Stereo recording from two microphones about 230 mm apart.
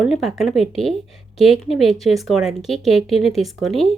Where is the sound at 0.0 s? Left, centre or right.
Centre.